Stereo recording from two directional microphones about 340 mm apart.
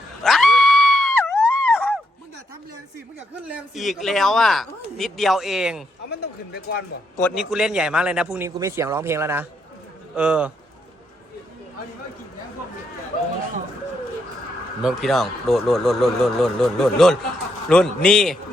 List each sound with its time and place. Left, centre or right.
0.2 s screaming: centre
3.4 s speech: centre
6.1 s speech: left
7.2 s speech: centre
14.8 s speech: centre